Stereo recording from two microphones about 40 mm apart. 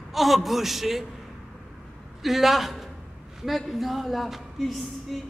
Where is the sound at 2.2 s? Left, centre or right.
Centre.